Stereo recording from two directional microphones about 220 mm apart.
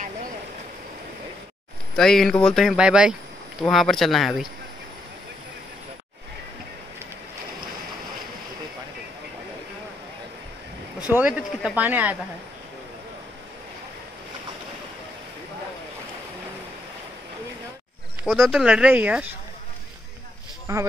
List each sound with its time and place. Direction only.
2.0 s speech: centre (ahead or behind)
11.1 s speech: 5° right (ahead or behind)
18.2 s speech: centre (ahead or behind)
20.7 s speech: 15° right (ahead or behind)